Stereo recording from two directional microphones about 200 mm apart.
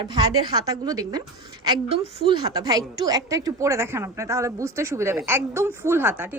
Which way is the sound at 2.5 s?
20° right (ahead or behind).